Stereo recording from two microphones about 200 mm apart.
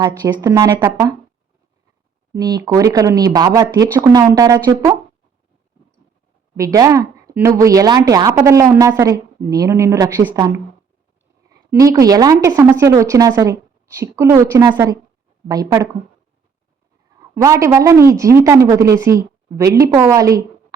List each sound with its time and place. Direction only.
0.4 s speech: 15° right (ahead or behind)
2.3 s speech: 20° right (ahead or behind)
6.6 s speech: 15° right (ahead or behind)
11.7 s speech: 15° right (ahead or behind)
17.3 s speech: 15° right (ahead or behind)